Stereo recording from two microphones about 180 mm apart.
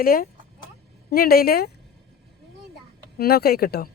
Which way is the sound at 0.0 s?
55° left (ahead or behind).